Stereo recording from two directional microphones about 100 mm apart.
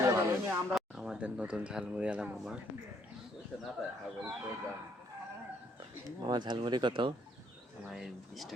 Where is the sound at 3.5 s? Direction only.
10° left (ahead or behind).